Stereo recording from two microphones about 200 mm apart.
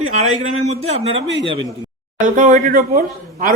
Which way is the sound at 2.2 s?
40° right (ahead or behind).